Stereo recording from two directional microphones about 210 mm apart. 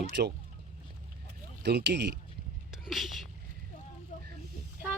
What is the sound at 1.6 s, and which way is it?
Speech, 55° right (ahead or behind).